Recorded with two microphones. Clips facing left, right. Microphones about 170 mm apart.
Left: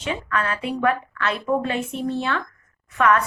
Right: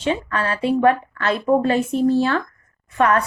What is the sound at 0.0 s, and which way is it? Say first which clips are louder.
A woman's voice: right 4 dB; 30° right (ahead or behind).